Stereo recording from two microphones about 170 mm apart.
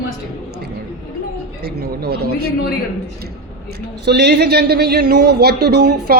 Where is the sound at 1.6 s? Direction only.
70° right (ahead or behind).